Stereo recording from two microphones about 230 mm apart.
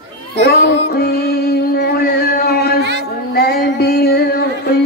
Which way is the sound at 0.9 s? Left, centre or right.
Left.